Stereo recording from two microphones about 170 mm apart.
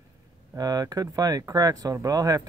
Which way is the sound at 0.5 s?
20° right (ahead or behind).